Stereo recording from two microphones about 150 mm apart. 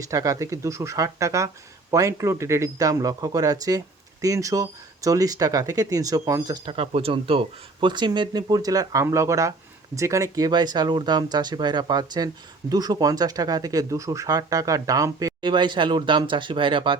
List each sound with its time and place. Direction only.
0.1 s speech: 20° right (ahead or behind)